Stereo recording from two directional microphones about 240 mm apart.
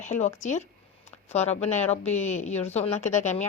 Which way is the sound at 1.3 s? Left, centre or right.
Left.